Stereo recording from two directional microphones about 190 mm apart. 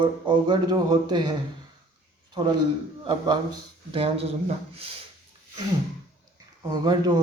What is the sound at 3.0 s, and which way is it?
A man's voice, 25° right (ahead or behind).